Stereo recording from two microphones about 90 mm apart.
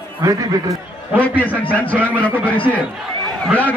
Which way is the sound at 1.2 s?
15° left (ahead or behind).